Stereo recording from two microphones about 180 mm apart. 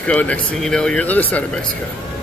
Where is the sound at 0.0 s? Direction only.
10° left (ahead or behind).